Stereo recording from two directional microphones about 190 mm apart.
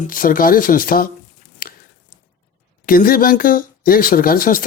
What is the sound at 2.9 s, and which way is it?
Speech, 50° left (ahead or behind).